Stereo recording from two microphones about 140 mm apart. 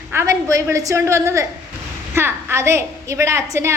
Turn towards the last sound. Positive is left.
turn(degrees=-20)  # may be behind; listen again after turning